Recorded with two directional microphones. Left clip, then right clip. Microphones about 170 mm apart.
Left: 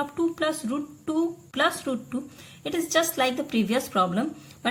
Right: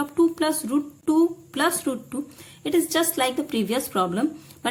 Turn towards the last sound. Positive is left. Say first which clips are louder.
# right 3 dB
turn(degrees=-20)  # may be behind; listen again after turning